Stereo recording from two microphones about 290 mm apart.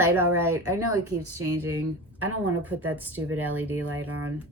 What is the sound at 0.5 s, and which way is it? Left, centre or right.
Speech, right.